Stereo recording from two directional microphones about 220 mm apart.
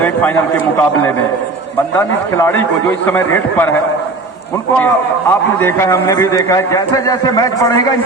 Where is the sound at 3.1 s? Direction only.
10° left (ahead or behind).